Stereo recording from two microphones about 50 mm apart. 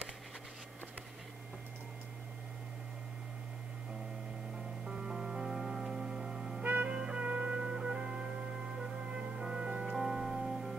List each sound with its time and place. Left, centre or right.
4.8 s music: centre
6.6 s music: right
6.9 s music: right
9.9 s music: centre